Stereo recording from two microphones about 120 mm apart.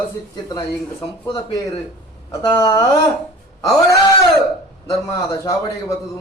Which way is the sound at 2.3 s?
25° left (ahead or behind).